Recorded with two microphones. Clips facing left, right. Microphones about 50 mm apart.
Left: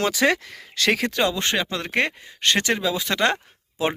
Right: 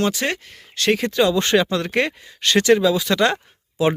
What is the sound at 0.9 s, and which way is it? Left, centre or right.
Speech, left.